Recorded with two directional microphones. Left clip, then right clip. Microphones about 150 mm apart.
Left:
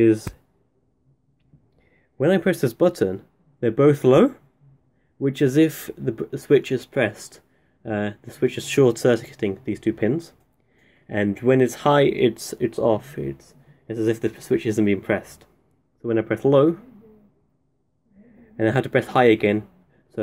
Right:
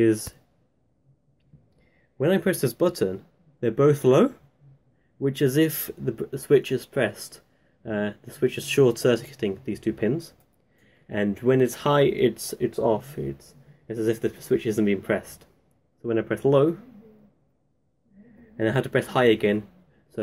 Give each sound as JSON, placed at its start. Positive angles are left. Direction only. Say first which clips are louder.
{"t": 0.0, "sound": "speech", "louder": "left 4 dB", "side_deg": 30}
{"t": 1.8, "sound": "speech", "louder": "left 4 dB", "side_deg": 35}
{"t": 18.6, "sound": "speech", "louder": "left 3 dB", "side_deg": 40}